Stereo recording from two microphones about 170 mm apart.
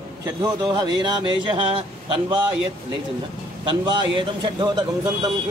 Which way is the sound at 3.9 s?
25° right (ahead or behind).